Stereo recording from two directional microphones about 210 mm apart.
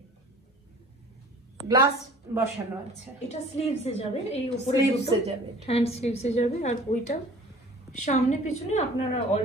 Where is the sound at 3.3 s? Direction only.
30° left (ahead or behind).